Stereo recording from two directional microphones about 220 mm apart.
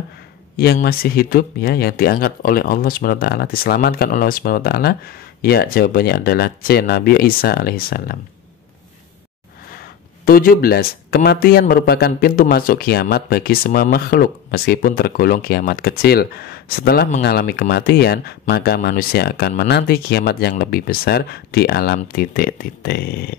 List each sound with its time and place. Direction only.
0.6 s speech: 45° left (ahead or behind)
10.2 s speech: 40° left (ahead or behind)